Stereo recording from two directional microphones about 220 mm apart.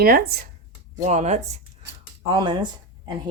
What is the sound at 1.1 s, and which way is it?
Speech, 30° right (ahead or behind).